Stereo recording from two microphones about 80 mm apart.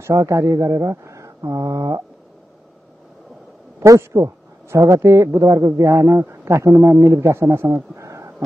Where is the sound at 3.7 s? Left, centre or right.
Right.